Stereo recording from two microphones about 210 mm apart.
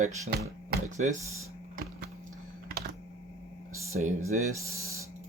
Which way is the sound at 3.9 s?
40° right (ahead or behind).